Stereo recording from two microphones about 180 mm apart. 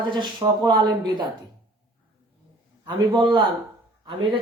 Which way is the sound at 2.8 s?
25° right (ahead or behind).